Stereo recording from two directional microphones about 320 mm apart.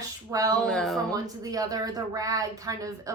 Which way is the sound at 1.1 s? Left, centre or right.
Centre.